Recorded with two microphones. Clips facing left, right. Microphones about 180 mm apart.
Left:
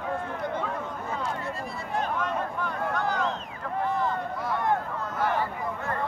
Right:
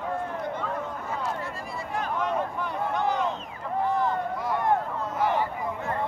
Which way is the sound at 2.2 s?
15° right (ahead or behind).